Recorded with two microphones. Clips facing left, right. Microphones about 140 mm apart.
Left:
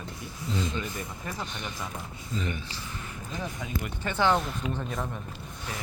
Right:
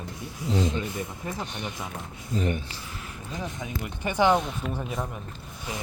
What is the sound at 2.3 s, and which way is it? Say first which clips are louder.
Speech: right 6 dB; 50° right (ahead or behind).